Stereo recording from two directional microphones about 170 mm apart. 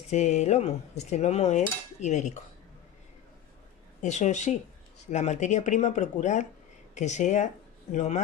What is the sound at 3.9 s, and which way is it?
Speech, 45° left (ahead or behind).